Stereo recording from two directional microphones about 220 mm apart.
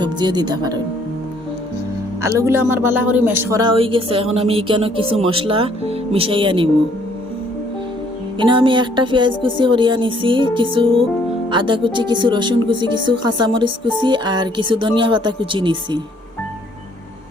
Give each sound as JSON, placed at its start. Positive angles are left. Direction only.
{"t": 0.0, "sound": "speech", "side_deg": -20}
{"t": 2.2, "sound": "speech", "side_deg": -10}
{"t": 8.4, "sound": "speech", "side_deg": -20}